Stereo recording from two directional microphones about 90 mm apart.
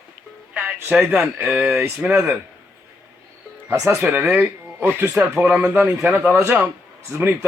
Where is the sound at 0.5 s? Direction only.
20° right (ahead or behind).